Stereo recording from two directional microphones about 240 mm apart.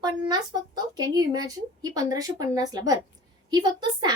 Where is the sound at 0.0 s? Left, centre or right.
Centre.